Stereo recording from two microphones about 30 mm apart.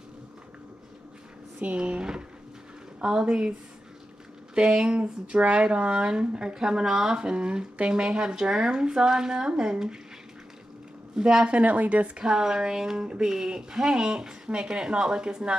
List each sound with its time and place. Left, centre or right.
1.8 s speech: right
4.6 s speech: right
11.1 s speech: right
11.4 s speech: right
12.2 s speech: right